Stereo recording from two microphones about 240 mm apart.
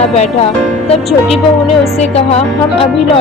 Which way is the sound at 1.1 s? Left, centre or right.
Centre.